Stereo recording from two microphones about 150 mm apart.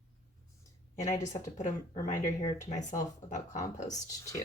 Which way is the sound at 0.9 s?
50° left (ahead or behind).